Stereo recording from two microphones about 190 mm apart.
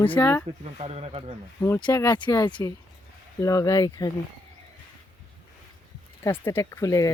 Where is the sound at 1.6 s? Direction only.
15° left (ahead or behind).